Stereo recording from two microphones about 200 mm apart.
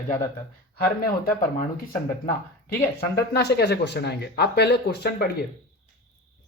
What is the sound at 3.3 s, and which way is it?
Speech, 55° left (ahead or behind).